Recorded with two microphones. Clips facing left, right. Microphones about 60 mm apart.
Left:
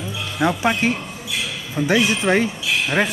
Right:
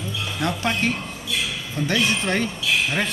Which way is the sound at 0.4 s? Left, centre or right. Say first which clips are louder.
Left 5 dB; centre.